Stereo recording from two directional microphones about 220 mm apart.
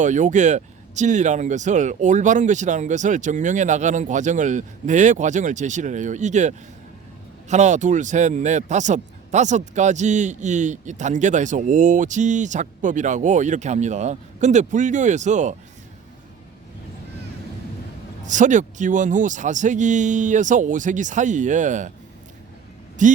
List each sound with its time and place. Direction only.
0.0 s a man's voice: 35° right (ahead or behind)
18.3 s a man's voice: 35° right (ahead or behind)
23.0 s a man's voice: 35° right (ahead or behind)